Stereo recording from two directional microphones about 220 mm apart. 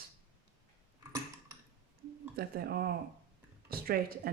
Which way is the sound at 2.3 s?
45° right (ahead or behind).